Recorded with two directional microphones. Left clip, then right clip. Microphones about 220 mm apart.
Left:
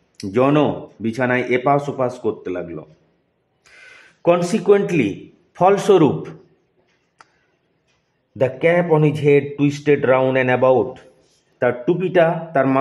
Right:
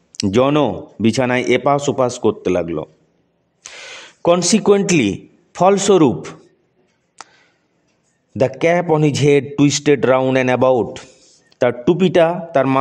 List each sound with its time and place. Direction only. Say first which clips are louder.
0.1 s a man's voice: right 2 dB; 40° right (ahead or behind)
8.4 s speech: right 1 dB; 45° right (ahead or behind)